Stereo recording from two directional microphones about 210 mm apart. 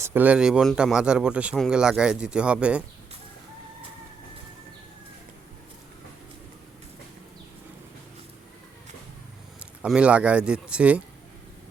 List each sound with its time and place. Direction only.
0.0 s speech: 10° right (ahead or behind)
9.6 s speech: 5° right (ahead or behind)